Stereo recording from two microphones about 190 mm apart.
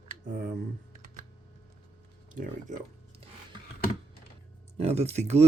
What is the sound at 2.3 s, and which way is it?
Speech, 45° right (ahead or behind).